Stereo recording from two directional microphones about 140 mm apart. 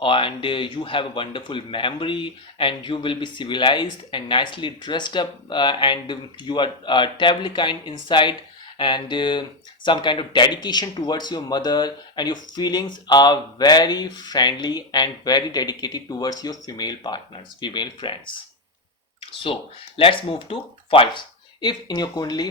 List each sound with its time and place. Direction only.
0.0 s speech: 40° left (ahead or behind)
20.0 s speech: 40° left (ahead or behind)